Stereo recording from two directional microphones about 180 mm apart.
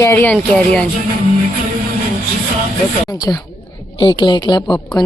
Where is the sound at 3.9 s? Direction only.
25° left (ahead or behind).